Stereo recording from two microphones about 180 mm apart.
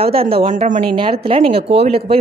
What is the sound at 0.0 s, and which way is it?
A woman's voice, 30° right (ahead or behind).